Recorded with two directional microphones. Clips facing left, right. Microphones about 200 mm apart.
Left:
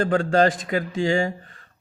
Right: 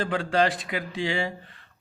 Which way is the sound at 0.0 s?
45° left (ahead or behind).